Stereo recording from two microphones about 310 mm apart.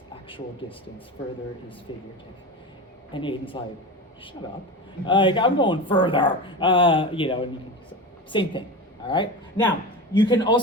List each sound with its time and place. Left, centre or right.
1.9 s speech: centre
3.1 s speech: centre
5.0 s speech: centre